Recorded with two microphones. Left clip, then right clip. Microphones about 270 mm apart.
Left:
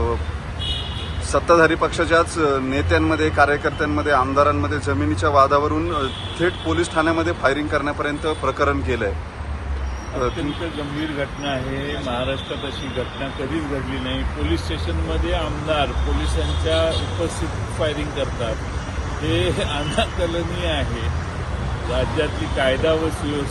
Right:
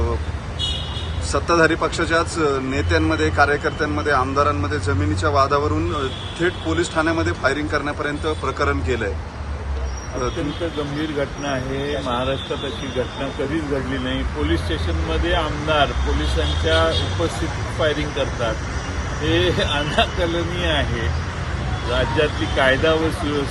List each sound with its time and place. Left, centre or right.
1.3 s speech: centre
14.7 s speech: centre
19.3 s speech: centre
22.2 s speech: centre